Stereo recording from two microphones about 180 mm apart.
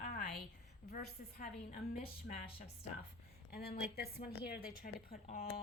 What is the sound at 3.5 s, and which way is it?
Speech, 60° left (ahead or behind).